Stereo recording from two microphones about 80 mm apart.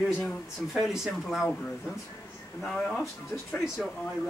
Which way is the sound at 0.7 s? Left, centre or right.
Centre.